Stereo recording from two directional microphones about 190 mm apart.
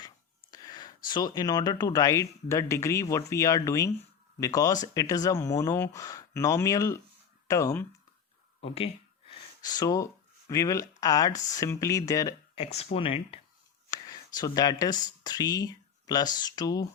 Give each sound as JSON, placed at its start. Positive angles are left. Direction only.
{"t": 0.5, "sound": "speech", "side_deg": 20}
{"t": 8.6, "sound": "a sound", "side_deg": 30}
{"t": 9.6, "sound": "speech", "side_deg": 20}
{"t": 12.5, "sound": "speech", "side_deg": 30}